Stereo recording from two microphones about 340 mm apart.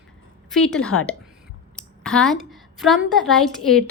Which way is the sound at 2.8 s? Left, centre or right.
Centre.